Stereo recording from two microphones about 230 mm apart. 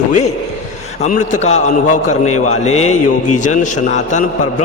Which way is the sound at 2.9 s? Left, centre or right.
Left.